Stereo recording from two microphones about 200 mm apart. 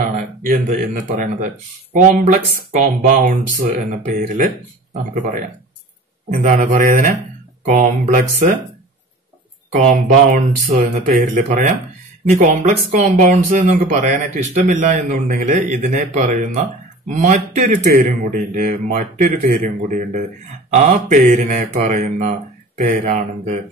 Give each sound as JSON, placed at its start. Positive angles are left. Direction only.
{"t": 0.0, "sound": "speech", "side_deg": -45}
{"t": 6.4, "sound": "speech", "side_deg": -40}
{"t": 9.7, "sound": "speech", "side_deg": -40}